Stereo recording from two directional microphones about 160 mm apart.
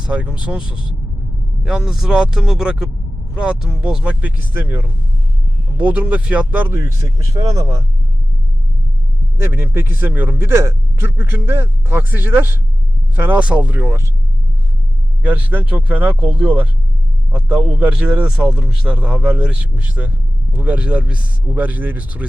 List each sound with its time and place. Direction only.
0.0 s speech: 10° right (ahead or behind)
9.4 s speech: 15° right (ahead or behind)
15.2 s speech: 10° right (ahead or behind)